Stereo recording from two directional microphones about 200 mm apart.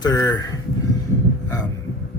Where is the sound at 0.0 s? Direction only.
20° left (ahead or behind).